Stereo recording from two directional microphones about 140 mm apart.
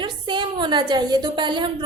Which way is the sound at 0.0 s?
35° right (ahead or behind).